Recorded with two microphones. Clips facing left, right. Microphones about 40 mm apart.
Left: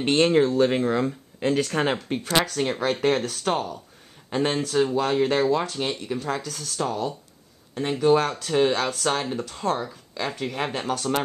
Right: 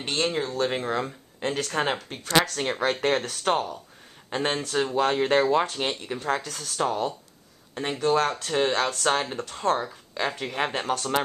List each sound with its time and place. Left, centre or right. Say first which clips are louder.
0.0 s speech: left 8 dB; left
0.5 s speech: left 5 dB; centre
2.0 s speech: even; centre
2.6 s speech: left 2 dB; centre; by 7.1 s right
7.7 s speech: left 3 dB; centre
8.0 s speech: left 3 dB; centre
8.3 s speech: left 3 dB; centre